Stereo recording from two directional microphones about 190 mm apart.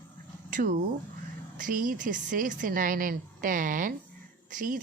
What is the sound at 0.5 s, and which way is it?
A woman's voice, 45° right (ahead or behind).